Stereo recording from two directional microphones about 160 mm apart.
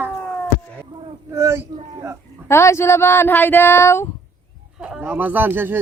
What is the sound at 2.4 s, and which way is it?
Speech, 15° left (ahead or behind).